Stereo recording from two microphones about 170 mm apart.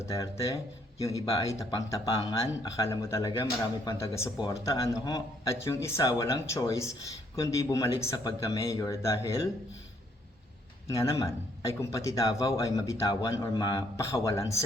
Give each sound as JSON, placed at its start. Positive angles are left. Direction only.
{"t": 0.0, "sound": "a man's voice", "side_deg": 15}
{"t": 10.8, "sound": "a man's voice", "side_deg": 20}